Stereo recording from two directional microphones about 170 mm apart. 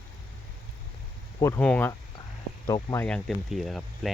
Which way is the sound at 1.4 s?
15° left (ahead or behind).